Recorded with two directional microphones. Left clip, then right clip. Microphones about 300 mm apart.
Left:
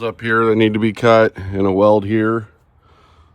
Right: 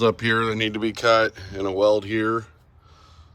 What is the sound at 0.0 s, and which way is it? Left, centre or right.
Speech, centre.